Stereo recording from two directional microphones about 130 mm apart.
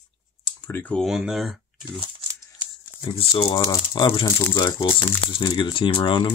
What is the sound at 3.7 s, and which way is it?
Speech, 30° left (ahead or behind).